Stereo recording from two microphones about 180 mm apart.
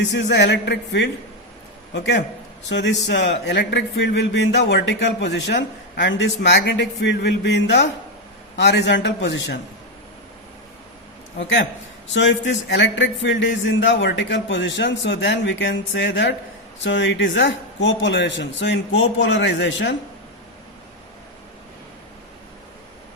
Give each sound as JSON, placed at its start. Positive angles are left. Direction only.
{"t": 0.0, "sound": "a man's voice", "side_deg": 75}
{"t": 2.6, "sound": "a man's voice", "side_deg": 90}
{"t": 11.3, "sound": "a man's voice", "side_deg": 85}